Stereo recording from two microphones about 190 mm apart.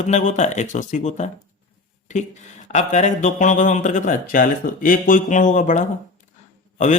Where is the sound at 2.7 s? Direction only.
40° left (ahead or behind).